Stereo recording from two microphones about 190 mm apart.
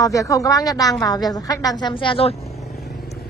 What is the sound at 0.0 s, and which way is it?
A woman's voice, 15° left (ahead or behind).